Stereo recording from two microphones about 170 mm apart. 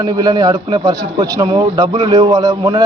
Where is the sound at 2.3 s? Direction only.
25° right (ahead or behind).